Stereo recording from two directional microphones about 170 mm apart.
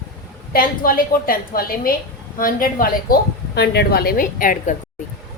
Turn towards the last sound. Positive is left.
turn(degrees=55)  # may be behind; listen again after turning